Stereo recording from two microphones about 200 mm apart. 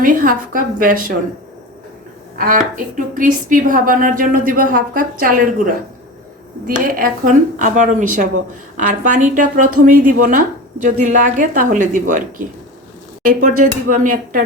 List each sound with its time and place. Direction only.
0.0 s a woman's voice: 45° right (ahead or behind)
2.4 s a woman's voice: 40° right (ahead or behind)
6.7 s a woman's voice: 45° right (ahead or behind)
13.2 s a woman's voice: 45° right (ahead or behind)